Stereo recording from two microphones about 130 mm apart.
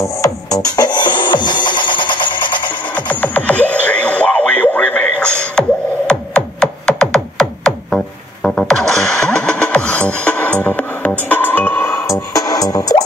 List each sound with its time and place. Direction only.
0.2 s music: 30° left (ahead or behind)
3.1 s music: 10° left (ahead or behind); by 13.0 s 30° left (ahead or behind)